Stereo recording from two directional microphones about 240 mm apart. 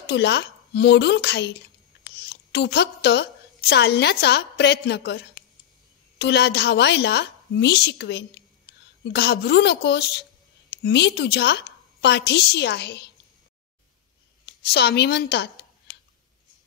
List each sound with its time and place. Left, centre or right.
0.0 s a woman's voice: left
14.4 s speech: left